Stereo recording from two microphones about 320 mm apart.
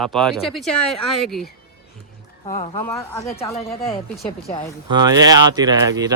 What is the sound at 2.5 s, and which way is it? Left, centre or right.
Speech, centre.